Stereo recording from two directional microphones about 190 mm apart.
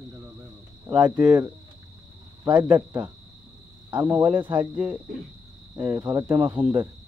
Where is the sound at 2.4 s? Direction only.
20° right (ahead or behind).